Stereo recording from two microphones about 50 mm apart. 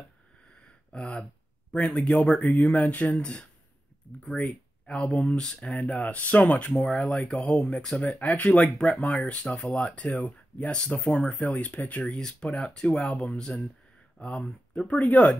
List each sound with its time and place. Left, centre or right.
0.9 s speech: left
2.0 s speech: centre
2.6 s speech: left
6.1 s speech: left
12.0 s speech: centre; by 15.3 s left